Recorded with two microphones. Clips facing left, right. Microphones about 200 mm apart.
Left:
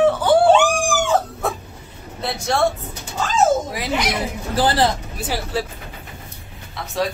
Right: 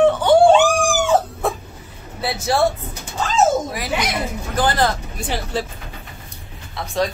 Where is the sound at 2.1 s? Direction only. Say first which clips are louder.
Right 2 dB; 5° right (ahead or behind).